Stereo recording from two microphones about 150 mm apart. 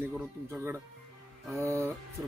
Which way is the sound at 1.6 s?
15° right (ahead or behind).